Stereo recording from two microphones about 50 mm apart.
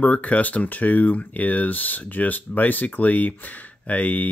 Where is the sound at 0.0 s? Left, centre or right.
Left.